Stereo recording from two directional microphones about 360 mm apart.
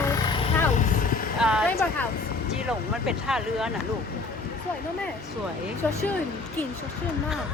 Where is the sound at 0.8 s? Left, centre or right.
Left.